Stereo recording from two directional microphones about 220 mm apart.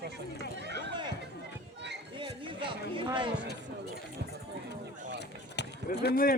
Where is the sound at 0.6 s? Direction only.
50° right (ahead or behind).